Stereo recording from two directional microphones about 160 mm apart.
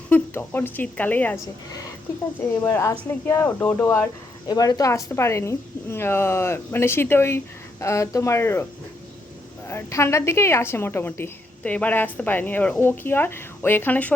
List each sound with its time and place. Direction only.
0.1 s a woman's voice: 15° left (ahead or behind)
2.6 s a woman's voice: 15° left (ahead or behind)
4.4 s a woman's voice: 25° left (ahead or behind)
9.6 s a woman's voice: 15° left (ahead or behind)